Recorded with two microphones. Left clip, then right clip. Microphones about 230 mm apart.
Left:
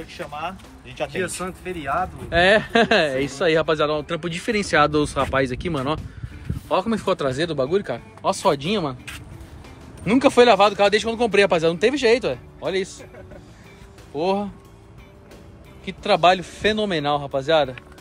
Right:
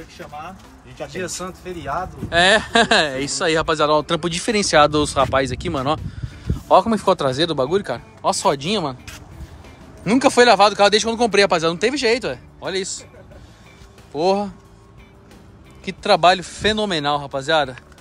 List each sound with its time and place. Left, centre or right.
0.1 s speech: centre
1.1 s speech: right
2.2 s speech: centre
3.9 s speech: centre
10.0 s speech: centre
14.1 s speech: centre
15.8 s speech: centre